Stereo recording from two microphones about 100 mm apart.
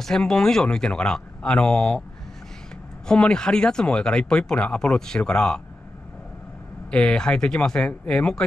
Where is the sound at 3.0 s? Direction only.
10° left (ahead or behind).